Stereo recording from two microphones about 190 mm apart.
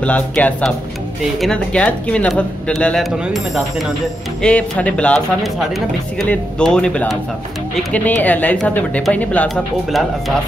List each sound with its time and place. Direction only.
0.0 s speech: 10° left (ahead or behind)